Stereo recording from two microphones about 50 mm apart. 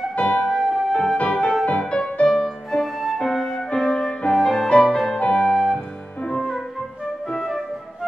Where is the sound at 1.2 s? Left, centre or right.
Left.